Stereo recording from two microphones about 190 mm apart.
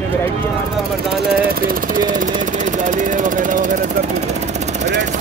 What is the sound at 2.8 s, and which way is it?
Vehicle, 45° right (ahead or behind).